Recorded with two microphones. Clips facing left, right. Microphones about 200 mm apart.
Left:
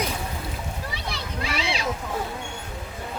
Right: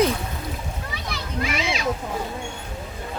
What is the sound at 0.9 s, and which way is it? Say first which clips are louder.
Children playing: right 2 dB; 30° left (ahead or behind).